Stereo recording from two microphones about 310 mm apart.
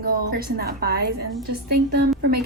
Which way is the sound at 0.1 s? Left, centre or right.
Right.